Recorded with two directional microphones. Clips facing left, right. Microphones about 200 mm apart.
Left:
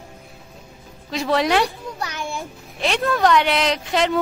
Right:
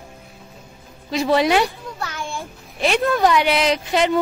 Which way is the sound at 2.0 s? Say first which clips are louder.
Even; 15° left (ahead or behind).